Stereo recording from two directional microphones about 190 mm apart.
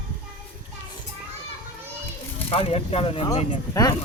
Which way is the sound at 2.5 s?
30° left (ahead or behind).